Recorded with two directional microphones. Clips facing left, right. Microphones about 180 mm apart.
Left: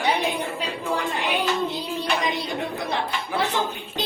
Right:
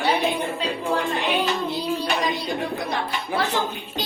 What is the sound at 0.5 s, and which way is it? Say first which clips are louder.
Music: right 3 dB; 10° left (ahead or behind).